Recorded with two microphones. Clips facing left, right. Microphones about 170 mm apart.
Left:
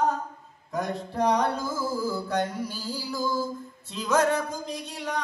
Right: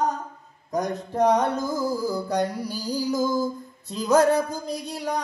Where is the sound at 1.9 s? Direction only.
15° right (ahead or behind).